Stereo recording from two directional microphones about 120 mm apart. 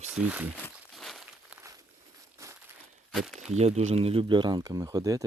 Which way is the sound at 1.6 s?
25° right (ahead or behind).